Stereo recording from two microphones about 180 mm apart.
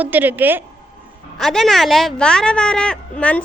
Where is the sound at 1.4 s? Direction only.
Centre (ahead or behind).